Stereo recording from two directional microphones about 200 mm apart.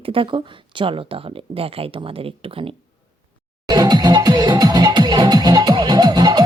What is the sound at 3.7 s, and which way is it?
Music, 20° right (ahead or behind).